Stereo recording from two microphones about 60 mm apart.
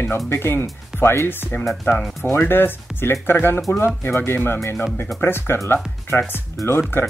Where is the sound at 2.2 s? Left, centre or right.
Left.